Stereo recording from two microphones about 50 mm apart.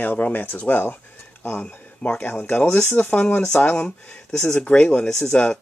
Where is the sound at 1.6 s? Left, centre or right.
Left.